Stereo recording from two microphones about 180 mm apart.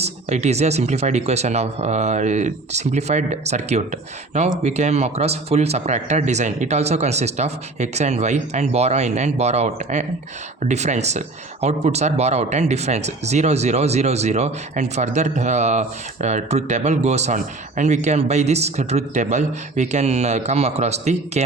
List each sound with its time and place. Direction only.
0.0 s speech: 40° right (ahead or behind)